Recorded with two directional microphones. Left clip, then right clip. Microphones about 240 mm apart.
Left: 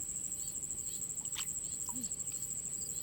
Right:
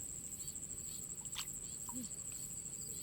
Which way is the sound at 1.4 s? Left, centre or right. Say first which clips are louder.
Left 3 dB; centre.